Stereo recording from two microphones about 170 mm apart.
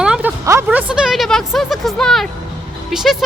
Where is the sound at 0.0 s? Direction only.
5° right (ahead or behind).